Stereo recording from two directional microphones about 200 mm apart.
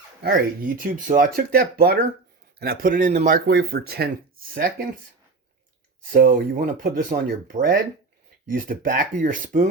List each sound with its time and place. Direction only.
0.2 s speech: 50° right (ahead or behind)
6.1 s speech: 45° right (ahead or behind)